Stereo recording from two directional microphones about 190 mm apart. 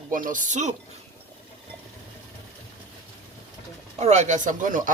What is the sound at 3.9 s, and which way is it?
Speech, 35° right (ahead or behind).